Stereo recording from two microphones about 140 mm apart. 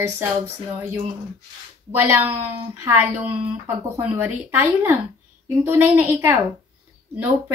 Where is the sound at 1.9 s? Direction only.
15° right (ahead or behind).